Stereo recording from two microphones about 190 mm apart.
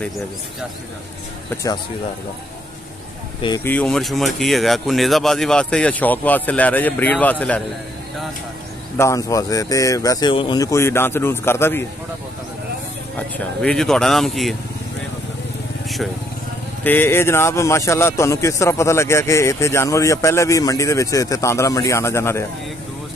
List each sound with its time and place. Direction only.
1.5 s speech: 15° left (ahead or behind)
3.6 s speech: 5° left (ahead or behind)
8.9 s speech: 15° left (ahead or behind)
13.4 s speech: 5° left (ahead or behind)
16.8 s speech: 10° left (ahead or behind)